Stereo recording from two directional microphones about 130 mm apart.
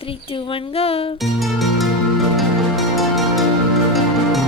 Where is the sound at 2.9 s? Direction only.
Centre (ahead or behind).